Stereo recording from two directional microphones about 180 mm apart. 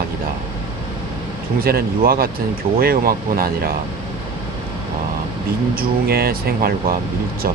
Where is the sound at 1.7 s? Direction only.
55° right (ahead or behind).